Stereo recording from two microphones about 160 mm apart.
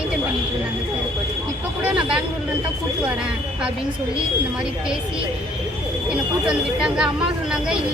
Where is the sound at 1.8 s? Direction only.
5° right (ahead or behind).